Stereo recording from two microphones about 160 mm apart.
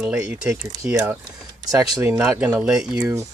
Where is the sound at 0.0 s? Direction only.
5° right (ahead or behind).